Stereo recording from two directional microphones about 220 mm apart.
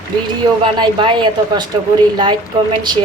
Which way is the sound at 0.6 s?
20° right (ahead or behind).